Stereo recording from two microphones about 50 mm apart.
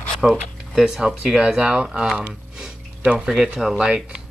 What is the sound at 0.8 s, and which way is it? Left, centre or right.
Speech, centre.